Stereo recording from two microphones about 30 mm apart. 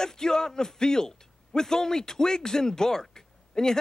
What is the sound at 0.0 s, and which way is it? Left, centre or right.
A man's voice, left.